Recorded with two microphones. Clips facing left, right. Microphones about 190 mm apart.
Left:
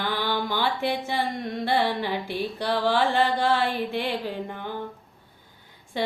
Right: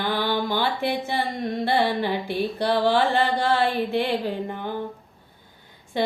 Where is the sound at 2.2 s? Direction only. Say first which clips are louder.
Right 4 dB; 15° right (ahead or behind).